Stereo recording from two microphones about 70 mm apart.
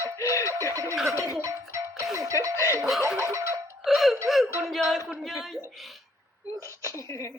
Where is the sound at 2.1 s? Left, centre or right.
Right.